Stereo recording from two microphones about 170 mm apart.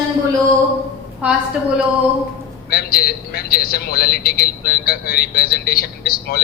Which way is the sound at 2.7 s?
65° left (ahead or behind).